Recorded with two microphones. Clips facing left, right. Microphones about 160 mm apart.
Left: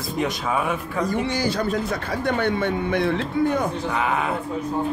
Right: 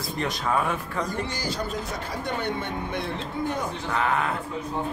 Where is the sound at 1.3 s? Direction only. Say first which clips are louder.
Left 7 dB; 65° left (ahead or behind).